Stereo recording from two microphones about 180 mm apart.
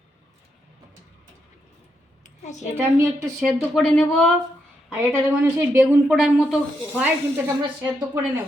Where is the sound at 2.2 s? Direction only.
40° left (ahead or behind).